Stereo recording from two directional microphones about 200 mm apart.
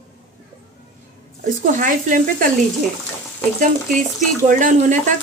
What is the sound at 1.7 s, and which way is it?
Speech, 40° right (ahead or behind).